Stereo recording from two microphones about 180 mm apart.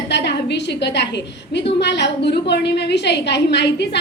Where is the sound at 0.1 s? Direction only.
70° left (ahead or behind).